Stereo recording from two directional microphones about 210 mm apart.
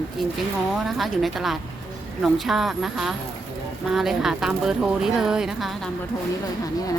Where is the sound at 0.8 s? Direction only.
Centre (ahead or behind).